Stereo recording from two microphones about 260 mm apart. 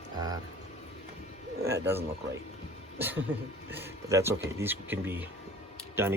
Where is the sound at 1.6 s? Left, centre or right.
Centre.